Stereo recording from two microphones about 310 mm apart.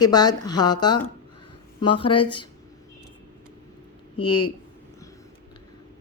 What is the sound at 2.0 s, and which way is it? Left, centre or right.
Speech, centre.